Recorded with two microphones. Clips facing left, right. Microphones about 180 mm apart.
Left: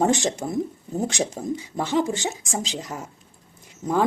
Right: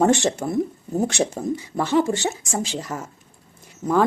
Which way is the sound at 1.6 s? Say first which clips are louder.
Right 3 dB; 15° left (ahead or behind).